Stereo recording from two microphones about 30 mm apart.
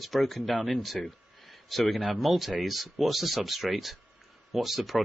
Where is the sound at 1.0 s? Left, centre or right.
Left.